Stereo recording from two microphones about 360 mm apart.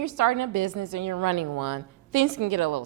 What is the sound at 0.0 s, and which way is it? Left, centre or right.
A woman's voice, right.